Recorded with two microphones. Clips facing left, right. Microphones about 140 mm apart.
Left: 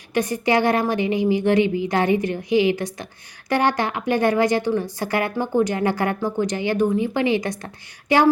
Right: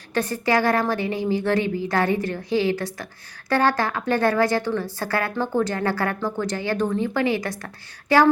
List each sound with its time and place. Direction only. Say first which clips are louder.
0.1 s a woman's voice: left 2 dB; 15° left (ahead or behind)